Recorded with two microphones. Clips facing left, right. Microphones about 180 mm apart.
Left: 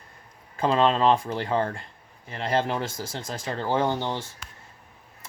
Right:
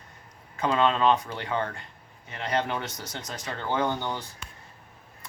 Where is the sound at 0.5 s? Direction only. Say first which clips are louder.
Left 3 dB; 30° left (ahead or behind).